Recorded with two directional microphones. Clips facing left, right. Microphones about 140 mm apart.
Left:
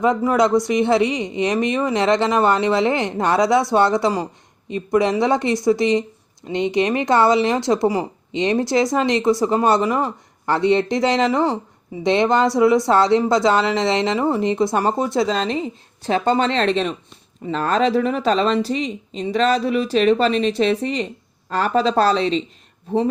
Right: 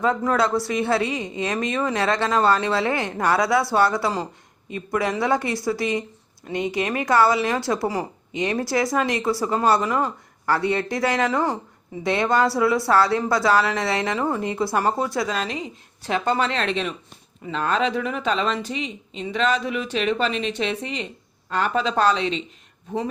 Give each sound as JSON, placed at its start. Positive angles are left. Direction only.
{"t": 0.0, "sound": "a woman's voice", "side_deg": 15}